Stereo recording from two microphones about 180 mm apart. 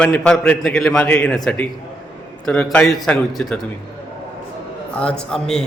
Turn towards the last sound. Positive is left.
turn(degrees=5)  # may be behind; listen again after turning